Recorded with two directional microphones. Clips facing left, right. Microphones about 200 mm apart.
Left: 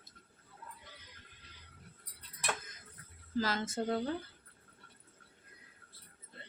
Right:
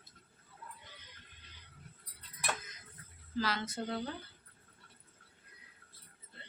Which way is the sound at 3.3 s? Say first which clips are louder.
Left 2 dB; 45° left (ahead or behind).